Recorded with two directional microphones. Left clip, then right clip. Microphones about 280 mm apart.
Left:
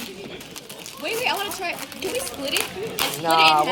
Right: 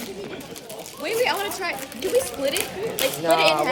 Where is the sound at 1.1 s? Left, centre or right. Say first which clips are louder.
Right 2 dB; centre.